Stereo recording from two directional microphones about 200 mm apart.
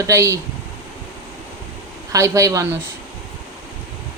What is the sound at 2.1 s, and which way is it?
Speech, 15° right (ahead or behind).